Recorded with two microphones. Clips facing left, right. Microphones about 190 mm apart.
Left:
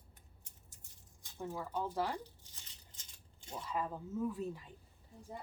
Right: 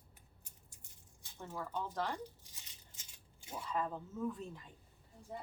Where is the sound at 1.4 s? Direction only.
10° left (ahead or behind).